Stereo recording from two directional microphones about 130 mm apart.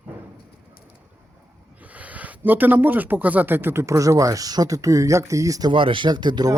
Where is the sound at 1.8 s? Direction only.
10° right (ahead or behind); by 5.7 s 25° right (ahead or behind).